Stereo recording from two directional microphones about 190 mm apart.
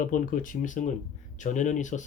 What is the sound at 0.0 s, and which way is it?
Speech, 45° left (ahead or behind).